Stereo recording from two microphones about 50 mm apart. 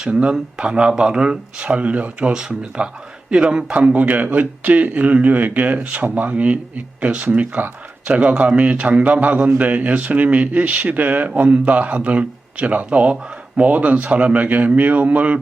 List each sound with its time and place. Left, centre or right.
0.1 s speech: right